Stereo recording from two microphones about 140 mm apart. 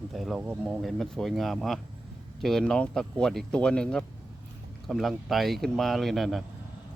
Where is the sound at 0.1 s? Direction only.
Centre (ahead or behind).